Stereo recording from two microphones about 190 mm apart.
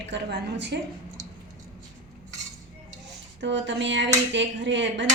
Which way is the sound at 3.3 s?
70° right (ahead or behind).